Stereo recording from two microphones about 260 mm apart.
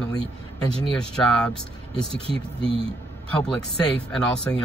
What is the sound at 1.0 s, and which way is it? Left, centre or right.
Speech, centre.